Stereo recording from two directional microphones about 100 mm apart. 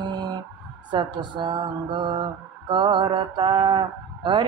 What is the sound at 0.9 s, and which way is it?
Mantra, 50° right (ahead or behind).